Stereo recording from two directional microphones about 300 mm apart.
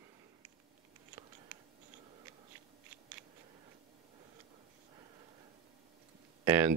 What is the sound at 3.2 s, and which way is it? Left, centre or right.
Scissors, centre.